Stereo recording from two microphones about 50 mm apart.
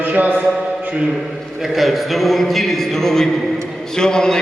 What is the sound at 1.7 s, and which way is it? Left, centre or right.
A man's voice, centre.